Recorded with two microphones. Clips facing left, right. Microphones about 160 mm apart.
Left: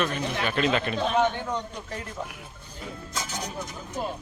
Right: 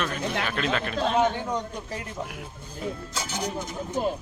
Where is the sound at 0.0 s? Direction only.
Centre (ahead or behind).